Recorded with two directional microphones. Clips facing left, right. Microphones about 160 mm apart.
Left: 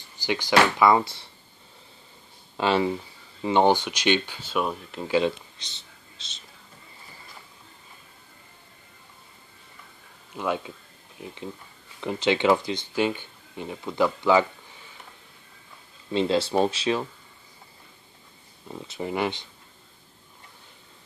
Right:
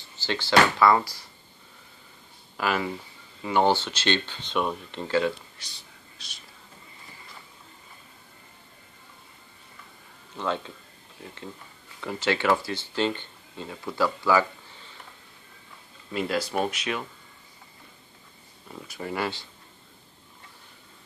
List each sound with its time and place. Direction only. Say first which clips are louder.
0.2 s speech: left 1 dB; 15° left (ahead or behind)
2.5 s speech: left 5 dB; 25° left (ahead or behind); by 5.1 s 5° left (ahead or behind)
5.1 s speech: left 2 dB; 20° left (ahead or behind)
10.3 s speech: left 2 dB; 10° left (ahead or behind)
16.1 s speech: left 5 dB; 25° left (ahead or behind)
18.7 s speech: left 3 dB; 25° left (ahead or behind)